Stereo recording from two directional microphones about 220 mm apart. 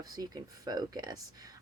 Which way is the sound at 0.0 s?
15° right (ahead or behind).